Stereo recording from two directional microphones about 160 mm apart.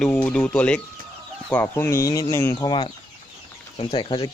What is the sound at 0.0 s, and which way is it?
Speech, 10° left (ahead or behind).